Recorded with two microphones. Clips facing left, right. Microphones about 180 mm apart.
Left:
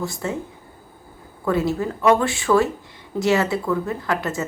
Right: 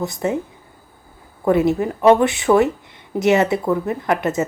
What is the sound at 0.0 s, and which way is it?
Speech, 20° right (ahead or behind).